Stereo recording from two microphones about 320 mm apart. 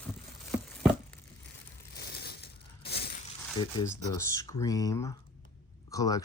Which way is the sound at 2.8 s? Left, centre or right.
Left.